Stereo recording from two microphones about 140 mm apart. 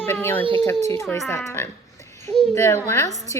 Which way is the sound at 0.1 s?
15° left (ahead or behind).